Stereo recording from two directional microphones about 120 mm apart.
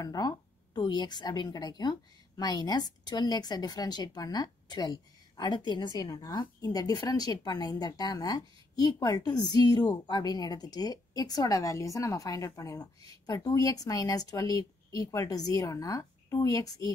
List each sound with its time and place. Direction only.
0.0 s a woman's voice: 35° left (ahead or behind)